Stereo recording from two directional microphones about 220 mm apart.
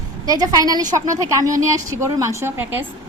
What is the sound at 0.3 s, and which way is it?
A woman's voice, 15° right (ahead or behind).